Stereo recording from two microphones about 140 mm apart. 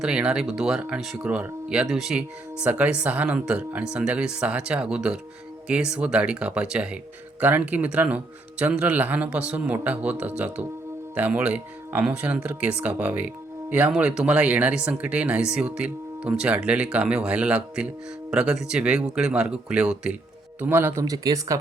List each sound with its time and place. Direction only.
0.0 s speech: 5° right (ahead or behind); by 21.6 s 25° right (ahead or behind)